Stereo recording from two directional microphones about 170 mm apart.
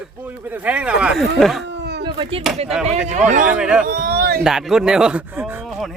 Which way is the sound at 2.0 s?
30° right (ahead or behind).